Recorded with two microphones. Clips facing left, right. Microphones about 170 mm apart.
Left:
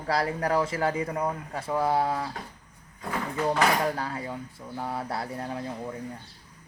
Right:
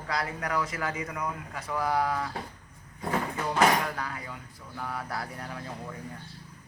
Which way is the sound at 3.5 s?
30° left (ahead or behind).